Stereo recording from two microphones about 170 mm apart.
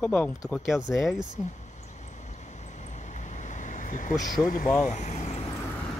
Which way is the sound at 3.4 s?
45° left (ahead or behind).